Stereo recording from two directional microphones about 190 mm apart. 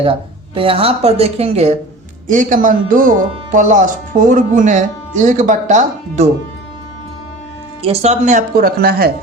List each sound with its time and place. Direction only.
0.0 s speech: 30° right (ahead or behind)
7.8 s speech: 35° right (ahead or behind); by 9.1 s 55° right (ahead or behind)